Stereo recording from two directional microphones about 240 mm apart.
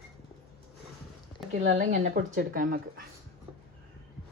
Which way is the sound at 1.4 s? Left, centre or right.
Centre.